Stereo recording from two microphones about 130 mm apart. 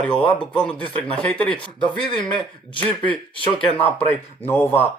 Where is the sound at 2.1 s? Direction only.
40° left (ahead or behind).